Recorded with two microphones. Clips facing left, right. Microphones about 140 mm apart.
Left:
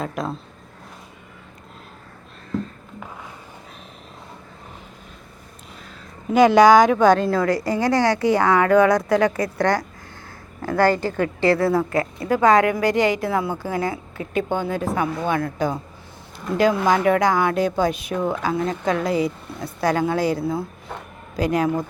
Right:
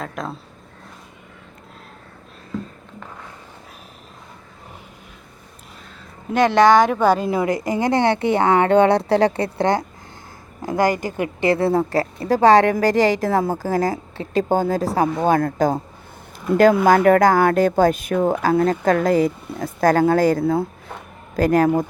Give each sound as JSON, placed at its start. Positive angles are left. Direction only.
{"t": 0.0, "sound": "speech", "side_deg": 0}
{"t": 6.3, "sound": "speech", "side_deg": 0}
{"t": 7.3, "sound": "a woman's voice", "side_deg": -20}
{"t": 16.8, "sound": "speech", "side_deg": -50}